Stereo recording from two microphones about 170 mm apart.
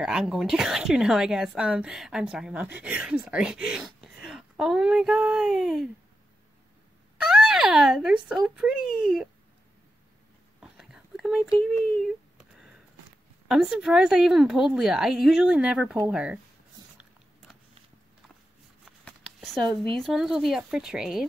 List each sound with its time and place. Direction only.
0.0 s a woman's voice: 5° right (ahead or behind)
7.2 s speech: 5° right (ahead or behind)
10.6 s whispering: 5° right (ahead or behind)
11.5 s a woman's voice: centre (ahead or behind)
18.9 s speech: centre (ahead or behind)